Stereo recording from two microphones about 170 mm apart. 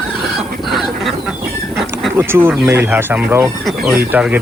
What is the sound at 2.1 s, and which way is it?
Speech, 15° right (ahead or behind).